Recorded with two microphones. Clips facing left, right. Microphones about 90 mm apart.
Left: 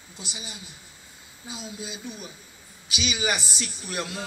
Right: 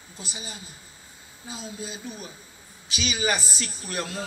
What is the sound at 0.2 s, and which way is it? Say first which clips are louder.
A man's voice: right 1 dB; 35° right (ahead or behind).